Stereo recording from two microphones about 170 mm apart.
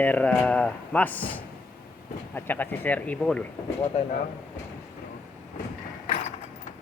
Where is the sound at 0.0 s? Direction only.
10° left (ahead or behind).